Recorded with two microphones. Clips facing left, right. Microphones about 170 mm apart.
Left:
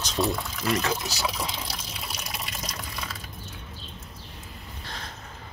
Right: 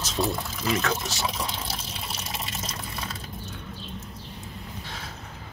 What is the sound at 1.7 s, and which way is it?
Liquid, 25° right (ahead or behind).